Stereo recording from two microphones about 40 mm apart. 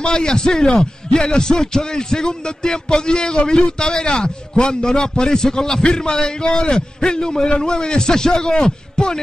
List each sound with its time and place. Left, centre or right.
0.0 s a man's voice: left